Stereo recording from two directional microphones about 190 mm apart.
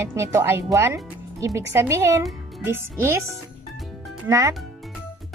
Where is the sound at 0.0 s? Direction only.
15° right (ahead or behind).